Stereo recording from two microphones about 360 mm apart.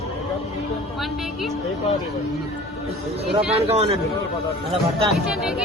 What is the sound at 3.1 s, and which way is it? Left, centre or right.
Speech, centre.